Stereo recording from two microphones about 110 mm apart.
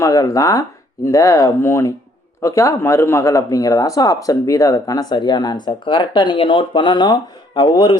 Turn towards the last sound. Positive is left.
turn(degrees=45)  # may be behind; listen again after turning